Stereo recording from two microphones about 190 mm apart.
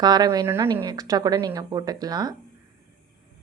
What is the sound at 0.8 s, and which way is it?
Speech, 20° right (ahead or behind).